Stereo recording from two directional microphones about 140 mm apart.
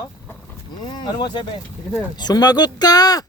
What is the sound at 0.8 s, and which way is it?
Speech, 30° left (ahead or behind).